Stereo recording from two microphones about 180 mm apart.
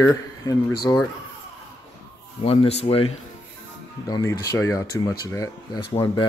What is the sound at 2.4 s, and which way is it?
Speech, 35° left (ahead or behind).